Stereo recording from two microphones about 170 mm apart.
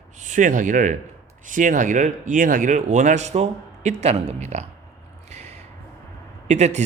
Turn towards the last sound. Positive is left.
turn(degrees=-40)  # may be behind; listen again after turning